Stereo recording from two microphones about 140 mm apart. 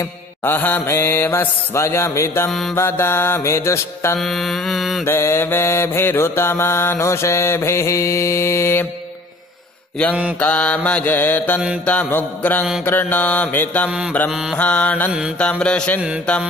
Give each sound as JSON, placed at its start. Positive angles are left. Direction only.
{"t": 0.4, "sound": "mantra", "side_deg": 15}
{"t": 4.2, "sound": "mantra", "side_deg": 0}
{"t": 5.0, "sound": "mantra", "side_deg": 15}
{"t": 10.4, "sound": "mantra", "side_deg": 10}